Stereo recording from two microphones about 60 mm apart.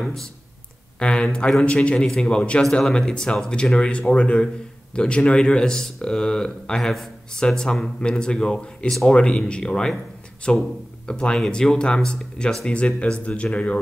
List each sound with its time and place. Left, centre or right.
0.0 s speech: centre